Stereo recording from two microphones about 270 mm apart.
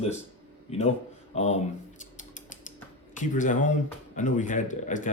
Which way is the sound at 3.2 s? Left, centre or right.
Left.